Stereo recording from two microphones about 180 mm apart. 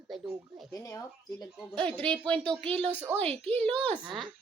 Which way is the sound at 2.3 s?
30° right (ahead or behind).